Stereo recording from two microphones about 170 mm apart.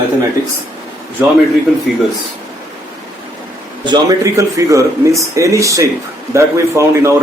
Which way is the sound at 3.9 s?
20° right (ahead or behind).